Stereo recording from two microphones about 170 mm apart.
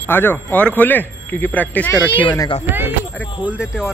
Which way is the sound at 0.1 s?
10° left (ahead or behind).